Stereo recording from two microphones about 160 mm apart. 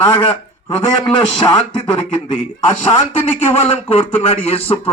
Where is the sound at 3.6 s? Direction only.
40° left (ahead or behind).